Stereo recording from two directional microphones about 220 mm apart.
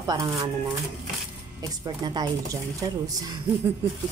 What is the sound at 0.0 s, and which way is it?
Speech, 15° right (ahead or behind).